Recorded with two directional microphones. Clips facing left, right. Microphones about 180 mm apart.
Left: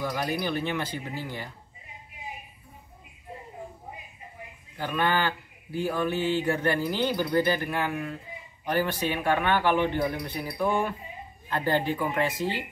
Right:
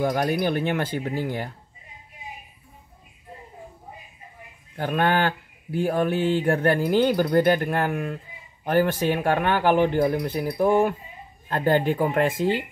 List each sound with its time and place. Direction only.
0.0 s speech: 50° right (ahead or behind)
4.7 s speech: 55° right (ahead or behind)